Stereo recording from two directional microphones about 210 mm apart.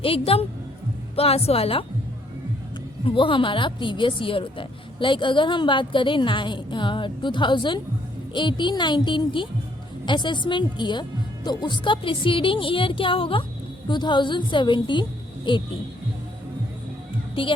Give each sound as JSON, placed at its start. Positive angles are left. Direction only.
{"t": 0.0, "sound": "a woman's voice", "side_deg": 25}
{"t": 3.2, "sound": "a woman's voice", "side_deg": 25}
{"t": 17.4, "sound": "a woman's voice", "side_deg": 25}